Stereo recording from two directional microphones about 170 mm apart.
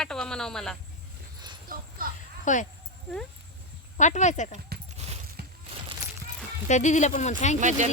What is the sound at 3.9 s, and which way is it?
Speech, 45° left (ahead or behind).